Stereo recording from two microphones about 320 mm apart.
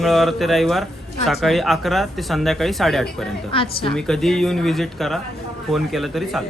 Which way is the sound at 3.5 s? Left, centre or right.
Centre.